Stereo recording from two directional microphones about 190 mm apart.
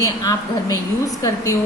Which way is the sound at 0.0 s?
20° left (ahead or behind).